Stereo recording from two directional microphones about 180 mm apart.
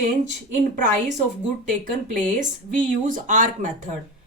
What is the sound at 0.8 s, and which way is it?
Speech, 40° right (ahead or behind).